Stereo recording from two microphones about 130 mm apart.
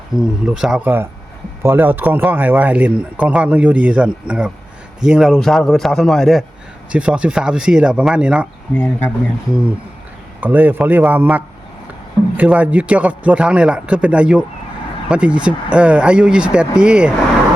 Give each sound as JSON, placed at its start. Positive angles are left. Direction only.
{"t": 0.2, "sound": "a man's voice", "side_deg": -5}
{"t": 8.7, "sound": "speech", "side_deg": 15}
{"t": 10.4, "sound": "a man's voice", "side_deg": -15}